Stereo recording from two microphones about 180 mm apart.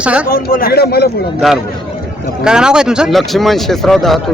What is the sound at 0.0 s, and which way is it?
Speech, 5° right (ahead or behind).